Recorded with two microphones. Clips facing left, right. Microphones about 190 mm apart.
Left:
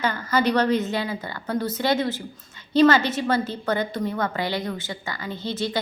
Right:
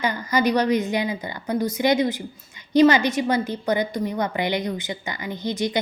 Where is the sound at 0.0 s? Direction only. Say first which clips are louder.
Right 1 dB; 15° right (ahead or behind).